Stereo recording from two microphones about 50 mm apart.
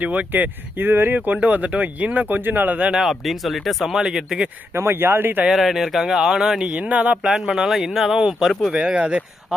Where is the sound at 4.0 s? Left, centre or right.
Centre.